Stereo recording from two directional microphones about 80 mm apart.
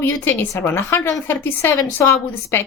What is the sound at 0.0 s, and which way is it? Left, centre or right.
A woman's voice, left.